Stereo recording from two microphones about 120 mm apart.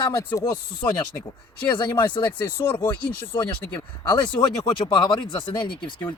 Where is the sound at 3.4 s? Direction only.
20° left (ahead or behind).